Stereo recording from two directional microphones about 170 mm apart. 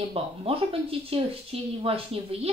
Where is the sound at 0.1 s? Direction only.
35° right (ahead or behind).